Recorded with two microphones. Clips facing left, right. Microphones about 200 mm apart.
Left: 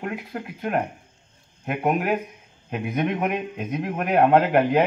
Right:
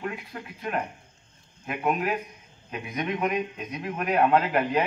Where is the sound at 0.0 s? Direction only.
55° left (ahead or behind).